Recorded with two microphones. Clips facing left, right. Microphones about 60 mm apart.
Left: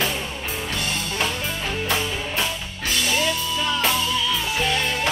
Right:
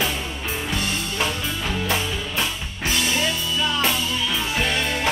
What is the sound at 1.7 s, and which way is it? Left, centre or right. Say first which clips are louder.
Music: even; left.